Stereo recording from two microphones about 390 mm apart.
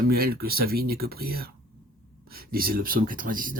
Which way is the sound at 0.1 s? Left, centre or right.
Right.